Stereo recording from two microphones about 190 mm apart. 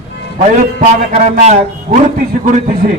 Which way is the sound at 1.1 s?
35° right (ahead or behind).